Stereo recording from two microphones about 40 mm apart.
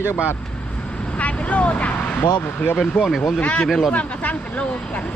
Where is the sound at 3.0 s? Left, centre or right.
Left.